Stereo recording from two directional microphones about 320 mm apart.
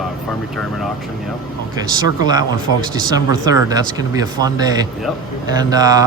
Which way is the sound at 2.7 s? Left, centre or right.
Left.